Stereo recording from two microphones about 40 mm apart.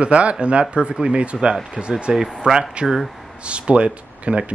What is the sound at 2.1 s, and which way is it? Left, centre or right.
Speech, centre.